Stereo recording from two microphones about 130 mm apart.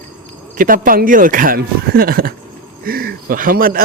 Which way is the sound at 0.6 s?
90° right.